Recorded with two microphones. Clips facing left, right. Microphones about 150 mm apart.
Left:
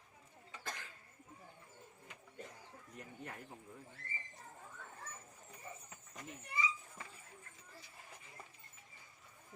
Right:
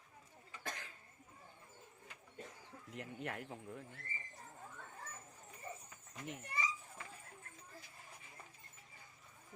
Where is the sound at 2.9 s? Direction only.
80° right.